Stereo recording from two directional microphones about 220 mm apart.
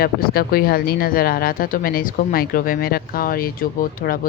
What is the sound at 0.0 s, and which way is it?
Speech, 45° left (ahead or behind).